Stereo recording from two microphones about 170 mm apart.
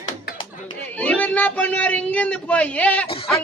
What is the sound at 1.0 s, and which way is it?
Speech, 10° left (ahead or behind).